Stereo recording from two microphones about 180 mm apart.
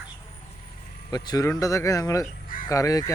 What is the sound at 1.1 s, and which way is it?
Speech, 20° left (ahead or behind).